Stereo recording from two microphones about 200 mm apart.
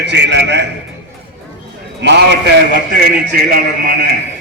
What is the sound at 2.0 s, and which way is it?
A man's voice, 60° right (ahead or behind).